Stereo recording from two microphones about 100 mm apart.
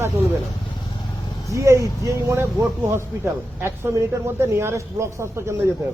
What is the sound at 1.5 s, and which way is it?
Speech, 30° right (ahead or behind).